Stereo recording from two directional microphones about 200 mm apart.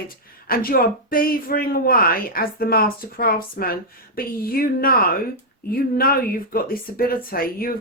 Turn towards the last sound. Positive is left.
turn(degrees=45)  # may be behind; listen again after turning